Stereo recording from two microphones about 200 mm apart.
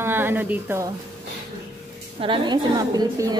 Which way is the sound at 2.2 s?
25° right (ahead or behind).